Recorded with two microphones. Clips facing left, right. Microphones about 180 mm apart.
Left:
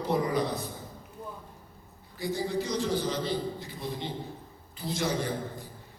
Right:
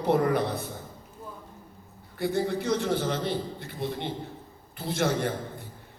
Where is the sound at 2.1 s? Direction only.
60° right (ahead or behind).